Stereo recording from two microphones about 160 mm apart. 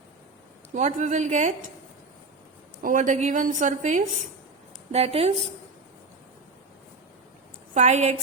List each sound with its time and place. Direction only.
0.7 s a woman's voice: 50° right (ahead or behind)
2.8 s a woman's voice: 55° right (ahead or behind)
4.9 s speech: 40° right (ahead or behind)
7.7 s a woman's voice: 45° right (ahead or behind)